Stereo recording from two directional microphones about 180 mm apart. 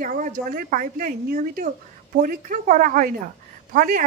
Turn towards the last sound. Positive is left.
turn(degrees=-50)  # may be behind; listen again after turning